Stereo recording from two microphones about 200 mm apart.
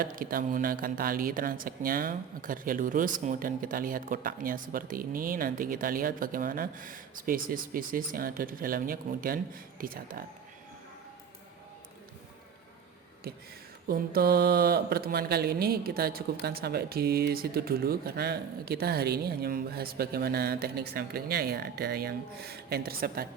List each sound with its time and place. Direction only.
0.0 s speech: 45° right (ahead or behind)
13.8 s speech: 50° right (ahead or behind)